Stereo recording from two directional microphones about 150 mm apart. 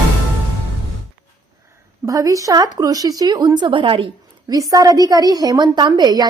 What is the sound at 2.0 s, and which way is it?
A woman's voice, 25° right (ahead or behind).